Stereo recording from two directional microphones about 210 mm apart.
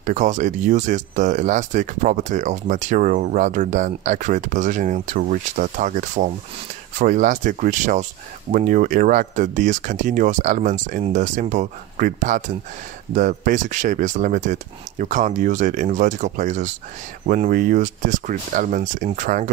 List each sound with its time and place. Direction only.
0.0 s speech: 35° right (ahead or behind)